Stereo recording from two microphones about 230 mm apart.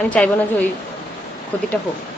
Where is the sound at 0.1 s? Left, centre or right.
Centre.